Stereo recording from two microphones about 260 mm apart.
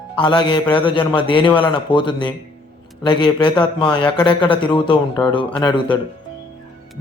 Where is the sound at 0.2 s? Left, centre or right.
Centre.